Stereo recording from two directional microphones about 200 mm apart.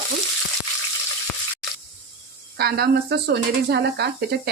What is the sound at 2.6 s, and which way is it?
Speech, 50° right (ahead or behind).